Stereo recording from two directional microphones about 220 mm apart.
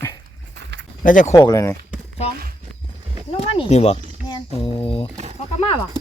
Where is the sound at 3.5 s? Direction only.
25° left (ahead or behind).